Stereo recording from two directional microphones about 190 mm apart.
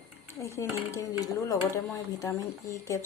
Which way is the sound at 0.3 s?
15° left (ahead or behind).